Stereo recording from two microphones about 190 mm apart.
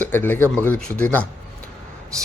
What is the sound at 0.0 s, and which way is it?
A man's voice, 10° left (ahead or behind).